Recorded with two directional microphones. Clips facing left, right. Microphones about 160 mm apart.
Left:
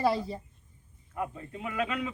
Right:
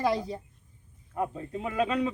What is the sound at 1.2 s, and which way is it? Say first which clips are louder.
Speech: right 4 dB; 30° right (ahead or behind).